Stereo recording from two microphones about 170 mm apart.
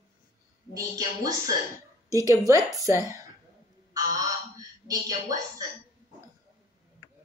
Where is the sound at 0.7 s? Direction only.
20° right (ahead or behind).